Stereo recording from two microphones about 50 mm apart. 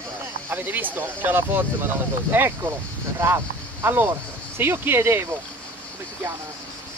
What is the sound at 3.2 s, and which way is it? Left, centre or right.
Speech, right.